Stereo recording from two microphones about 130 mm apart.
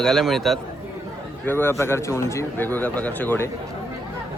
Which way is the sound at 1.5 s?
15° left (ahead or behind).